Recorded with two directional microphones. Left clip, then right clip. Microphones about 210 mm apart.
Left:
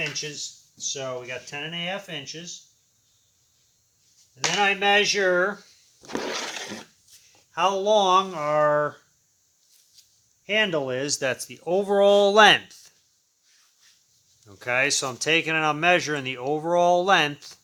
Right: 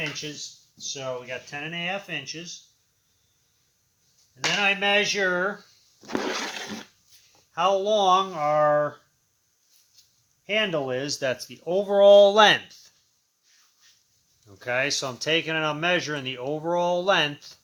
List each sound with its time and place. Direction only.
0.0 s speech: 25° left (ahead or behind)
1.3 s speech: 5° left (ahead or behind)
4.8 s speech: 25° left (ahead or behind)
6.1 s a sound: 25° right (ahead or behind)
7.5 s speech: 25° left (ahead or behind)
10.4 s speech: 20° left (ahead or behind)
14.4 s speech: 30° left (ahead or behind)